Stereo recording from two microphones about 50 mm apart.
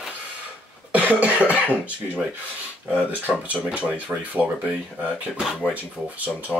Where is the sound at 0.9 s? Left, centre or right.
Right.